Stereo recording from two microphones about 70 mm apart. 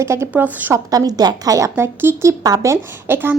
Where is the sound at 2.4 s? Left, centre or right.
Right.